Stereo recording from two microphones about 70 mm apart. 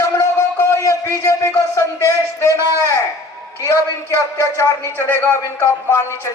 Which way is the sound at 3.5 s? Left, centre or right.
Left.